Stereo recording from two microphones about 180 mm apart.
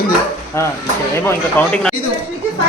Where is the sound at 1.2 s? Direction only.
10° left (ahead or behind).